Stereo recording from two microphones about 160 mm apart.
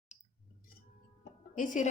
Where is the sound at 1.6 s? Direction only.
55° left (ahead or behind).